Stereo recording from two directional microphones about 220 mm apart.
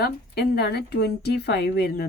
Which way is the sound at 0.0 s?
50° left (ahead or behind).